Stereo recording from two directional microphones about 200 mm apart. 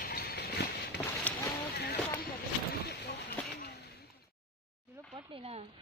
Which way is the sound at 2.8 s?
55° left (ahead or behind).